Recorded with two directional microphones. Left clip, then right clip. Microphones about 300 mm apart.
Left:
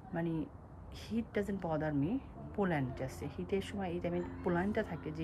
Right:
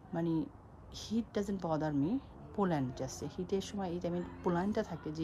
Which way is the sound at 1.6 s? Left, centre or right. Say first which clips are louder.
Right 1 dB; centre.